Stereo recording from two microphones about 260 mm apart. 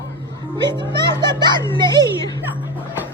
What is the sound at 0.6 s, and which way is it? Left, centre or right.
A child's voice, centre.